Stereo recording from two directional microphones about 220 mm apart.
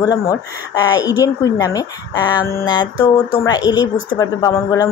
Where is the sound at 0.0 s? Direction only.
15° left (ahead or behind).